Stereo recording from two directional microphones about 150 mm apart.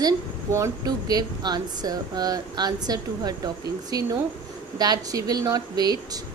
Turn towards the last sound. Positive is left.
turn(degrees=-25)  # may be behind; listen again after turning